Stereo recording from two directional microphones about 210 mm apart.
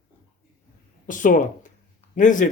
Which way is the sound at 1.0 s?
40° left (ahead or behind).